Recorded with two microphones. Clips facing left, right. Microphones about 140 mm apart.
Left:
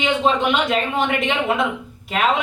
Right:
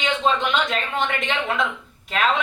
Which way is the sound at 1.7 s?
15° left (ahead or behind).